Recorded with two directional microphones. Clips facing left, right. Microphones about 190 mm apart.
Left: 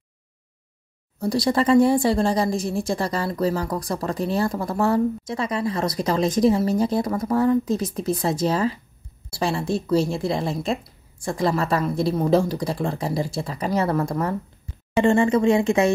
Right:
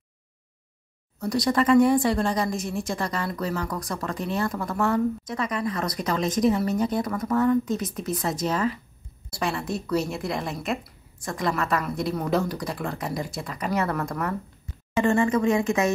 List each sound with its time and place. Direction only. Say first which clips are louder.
1.2 s a woman's voice: left 2 dB; 30° left (ahead or behind)